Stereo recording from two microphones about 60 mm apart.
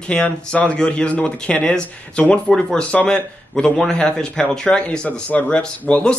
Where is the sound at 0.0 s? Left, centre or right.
Centre.